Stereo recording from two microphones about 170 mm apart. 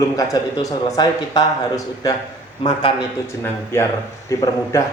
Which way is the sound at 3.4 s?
15° left (ahead or behind).